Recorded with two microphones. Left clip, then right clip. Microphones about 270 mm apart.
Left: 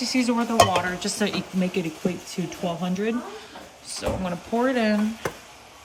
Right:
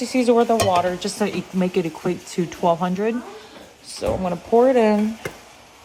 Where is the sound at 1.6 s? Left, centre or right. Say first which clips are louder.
Right 7 dB; centre.